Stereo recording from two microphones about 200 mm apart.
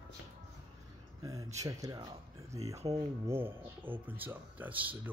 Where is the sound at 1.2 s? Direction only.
15° right (ahead or behind).